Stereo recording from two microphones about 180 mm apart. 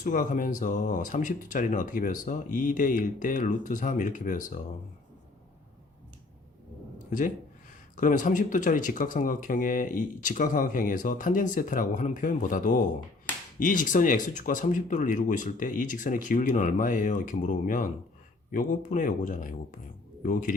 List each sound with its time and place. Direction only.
0.0 s speech: 45° left (ahead or behind)
7.9 s speech: 45° left (ahead or behind)